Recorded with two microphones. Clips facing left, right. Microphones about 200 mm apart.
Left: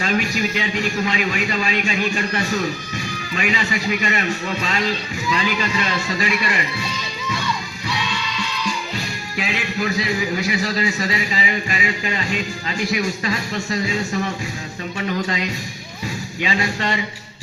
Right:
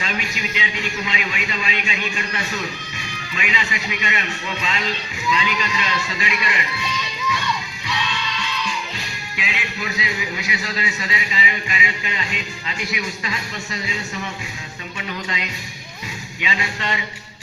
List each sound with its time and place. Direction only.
0.0 s a man's voice: 45° left (ahead or behind)
9.3 s a man's voice: 40° left (ahead or behind)
14.9 s music: 45° left (ahead or behind)
16.4 s a man's voice: 40° left (ahead or behind)